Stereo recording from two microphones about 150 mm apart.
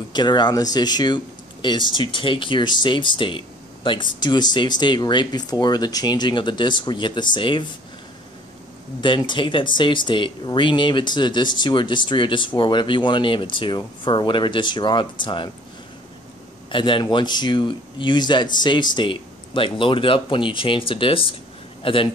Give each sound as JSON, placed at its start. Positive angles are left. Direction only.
{"t": 0.1, "sound": "speech", "side_deg": 30}
{"t": 9.0, "sound": "speech", "side_deg": 30}
{"t": 16.7, "sound": "speech", "side_deg": 35}